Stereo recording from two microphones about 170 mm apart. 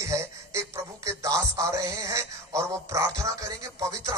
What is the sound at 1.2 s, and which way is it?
Speech, 20° right (ahead or behind).